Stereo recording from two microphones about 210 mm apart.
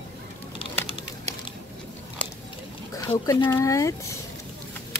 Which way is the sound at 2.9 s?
15° left (ahead or behind).